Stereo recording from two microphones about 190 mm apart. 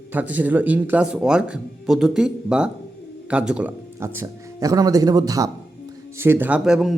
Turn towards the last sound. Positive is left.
turn(degrees=0)  # may be behind; listen again after turning